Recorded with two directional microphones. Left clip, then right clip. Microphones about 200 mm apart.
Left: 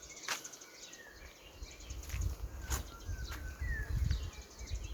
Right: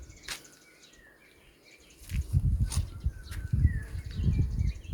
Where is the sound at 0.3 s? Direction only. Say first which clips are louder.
Even; centre (ahead or behind).